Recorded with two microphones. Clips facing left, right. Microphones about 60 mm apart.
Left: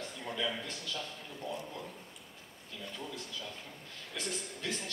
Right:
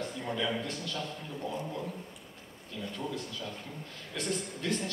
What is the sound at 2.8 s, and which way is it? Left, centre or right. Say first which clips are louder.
A man's voice: right 6 dB; centre.